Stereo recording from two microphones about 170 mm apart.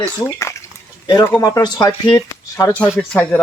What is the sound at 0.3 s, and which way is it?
Speech, 15° left (ahead or behind).